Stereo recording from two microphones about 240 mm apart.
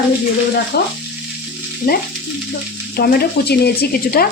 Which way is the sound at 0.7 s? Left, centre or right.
Left.